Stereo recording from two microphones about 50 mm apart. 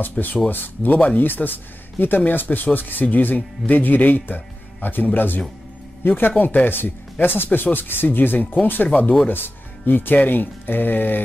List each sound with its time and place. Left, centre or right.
0.2 s speech: left
8.8 s speech: left
9.3 s speech: left